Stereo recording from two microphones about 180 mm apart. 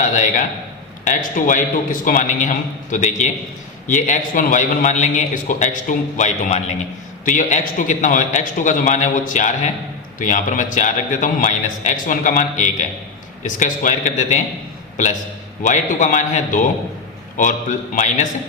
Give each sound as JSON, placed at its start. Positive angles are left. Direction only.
{"t": 0.0, "sound": "a man's voice", "side_deg": 45}
{"t": 15.6, "sound": "a man's voice", "side_deg": 45}
{"t": 17.9, "sound": "a man's voice", "side_deg": 45}